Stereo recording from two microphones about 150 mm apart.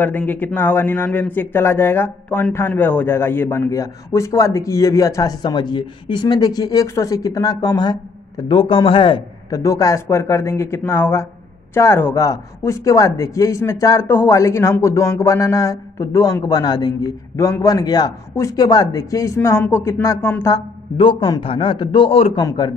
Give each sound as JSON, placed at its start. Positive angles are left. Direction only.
{"t": 0.0, "sound": "speech", "side_deg": 10}
{"t": 9.6, "sound": "speech", "side_deg": 20}
{"t": 21.0, "sound": "a man's voice", "side_deg": 35}
{"t": 22.4, "sound": "speech", "side_deg": 25}